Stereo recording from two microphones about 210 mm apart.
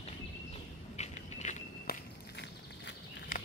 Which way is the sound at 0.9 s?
30° left (ahead or behind).